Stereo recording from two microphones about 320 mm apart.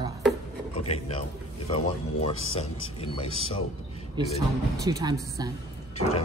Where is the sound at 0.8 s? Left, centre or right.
Centre.